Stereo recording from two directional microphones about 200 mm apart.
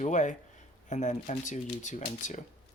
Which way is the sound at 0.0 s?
40° left (ahead or behind).